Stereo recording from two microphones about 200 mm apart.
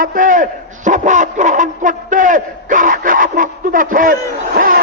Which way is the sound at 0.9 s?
40° right (ahead or behind).